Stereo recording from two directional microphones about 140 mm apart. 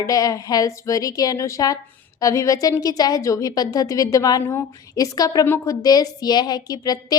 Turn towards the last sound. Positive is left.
turn(degrees=25)  # may be behind; listen again after turning